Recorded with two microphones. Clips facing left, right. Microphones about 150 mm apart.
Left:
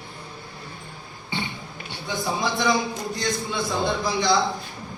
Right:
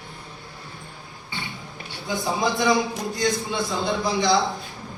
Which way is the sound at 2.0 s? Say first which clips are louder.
Right 2 dB; centre (ahead or behind).